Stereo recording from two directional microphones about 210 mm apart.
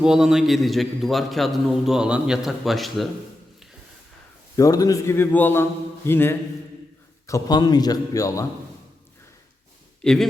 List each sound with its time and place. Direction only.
0.0 s a man's voice: 5° right (ahead or behind)
4.5 s a man's voice: 15° left (ahead or behind)
10.0 s speech: 5° left (ahead or behind)